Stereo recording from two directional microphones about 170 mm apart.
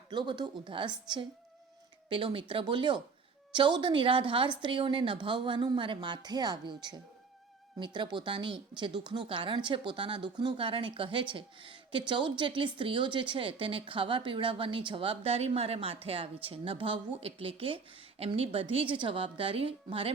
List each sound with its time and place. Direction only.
0.1 s a woman's voice: 25° right (ahead or behind)